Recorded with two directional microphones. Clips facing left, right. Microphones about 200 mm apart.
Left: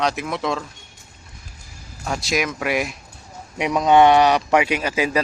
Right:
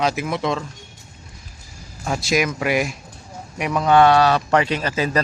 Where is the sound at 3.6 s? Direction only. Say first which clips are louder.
Left 1 dB; 20° left (ahead or behind).